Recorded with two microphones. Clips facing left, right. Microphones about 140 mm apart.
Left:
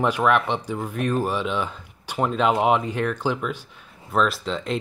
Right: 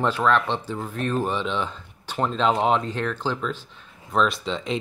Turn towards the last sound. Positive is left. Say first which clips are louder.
# even
turn(degrees=0)  # may be behind; listen again after turning